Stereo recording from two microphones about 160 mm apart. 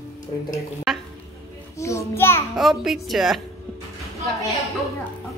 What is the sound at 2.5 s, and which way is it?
Speech, centre (ahead or behind).